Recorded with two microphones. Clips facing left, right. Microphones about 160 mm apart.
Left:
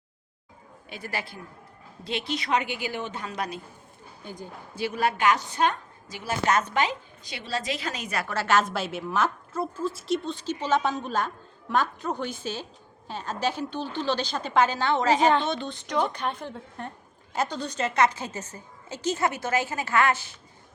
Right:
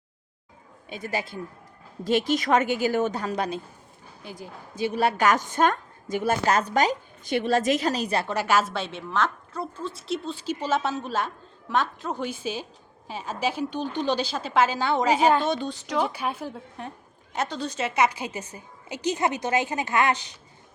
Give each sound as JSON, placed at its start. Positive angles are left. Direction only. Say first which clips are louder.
{"t": 1.0, "sound": "a man's voice", "louder": "right 4 dB", "side_deg": -20}
{"t": 2.0, "sound": "a woman's voice", "louder": "right 7 dB", "side_deg": -45}
{"t": 4.9, "sound": "a woman's voice", "louder": "right 2 dB", "side_deg": -35}
{"t": 6.4, "sound": "a woman's voice", "louder": "left 1 dB", "side_deg": -35}
{"t": 8.3, "sound": "a woman's voice", "louder": "left 2 dB", "side_deg": -15}
{"t": 8.7, "sound": "a woman's voice", "louder": "left 1 dB", "side_deg": 5}